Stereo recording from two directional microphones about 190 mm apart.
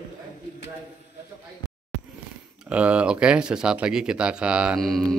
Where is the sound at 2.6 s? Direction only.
5° right (ahead or behind).